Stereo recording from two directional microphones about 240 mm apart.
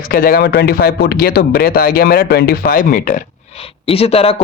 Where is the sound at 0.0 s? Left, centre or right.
Left.